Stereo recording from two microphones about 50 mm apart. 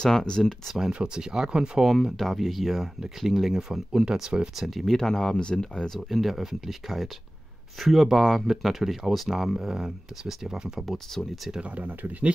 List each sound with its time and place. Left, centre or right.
0.0 s speech: centre
0.9 s speech: centre
1.9 s speech: centre
4.6 s speech: centre
5.9 s speech: centre
10.9 s speech: centre
11.6 s speech: right